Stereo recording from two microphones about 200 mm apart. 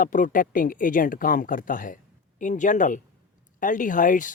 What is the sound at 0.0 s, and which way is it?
Speech, 40° left (ahead or behind).